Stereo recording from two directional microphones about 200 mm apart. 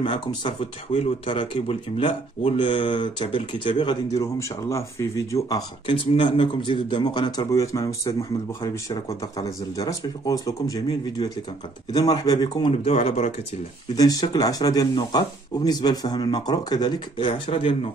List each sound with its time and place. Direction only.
0.0 s speech: 25° left (ahead or behind)
9.8 s speech: 15° left (ahead or behind)
12.7 s speech: 30° left (ahead or behind)
13.9 s speech: 20° left (ahead or behind)